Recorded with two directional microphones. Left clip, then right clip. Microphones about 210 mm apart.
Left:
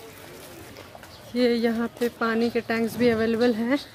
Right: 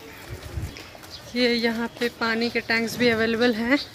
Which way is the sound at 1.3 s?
25° left (ahead or behind).